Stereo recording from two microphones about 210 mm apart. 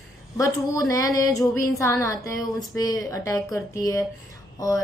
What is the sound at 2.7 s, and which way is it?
Speech, 15° left (ahead or behind).